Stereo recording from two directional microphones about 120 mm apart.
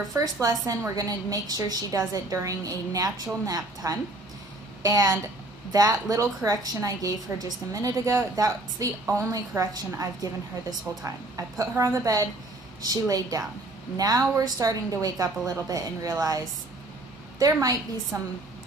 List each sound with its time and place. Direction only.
0.1 s a woman's voice: 30° right (ahead or behind)
17.4 s a woman's voice: 30° right (ahead or behind)